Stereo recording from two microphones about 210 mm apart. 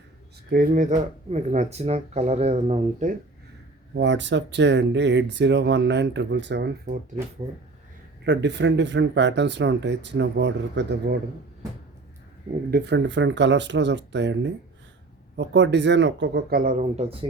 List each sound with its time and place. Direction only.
0.5 s speech: 40° right (ahead or behind)
3.9 s speech: 55° right (ahead or behind)
8.2 s speech: 55° right (ahead or behind)
12.7 s speech: 55° right (ahead or behind); by 17.2 s 30° right (ahead or behind)